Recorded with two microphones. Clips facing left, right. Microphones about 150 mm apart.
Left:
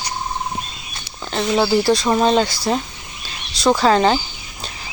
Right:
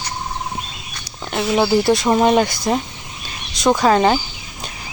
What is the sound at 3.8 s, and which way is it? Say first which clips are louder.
Speech: right 1 dB; 15° right (ahead or behind).